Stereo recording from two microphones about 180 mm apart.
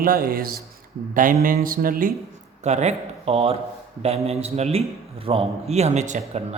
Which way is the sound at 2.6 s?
40° right (ahead or behind).